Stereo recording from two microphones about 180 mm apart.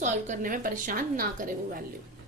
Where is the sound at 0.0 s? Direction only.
45° right (ahead or behind).